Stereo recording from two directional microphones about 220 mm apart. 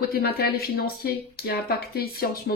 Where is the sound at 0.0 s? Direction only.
45° left (ahead or behind).